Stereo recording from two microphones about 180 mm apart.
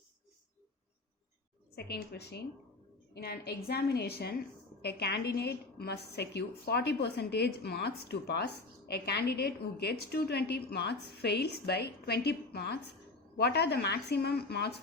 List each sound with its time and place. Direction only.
1.7 s a woman's voice: 65° left (ahead or behind)